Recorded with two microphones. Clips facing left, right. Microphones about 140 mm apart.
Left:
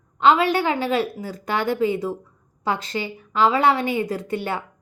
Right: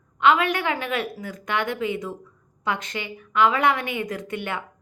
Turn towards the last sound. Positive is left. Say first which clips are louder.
# left 4 dB
turn(degrees=35)  # may be behind; listen again after turning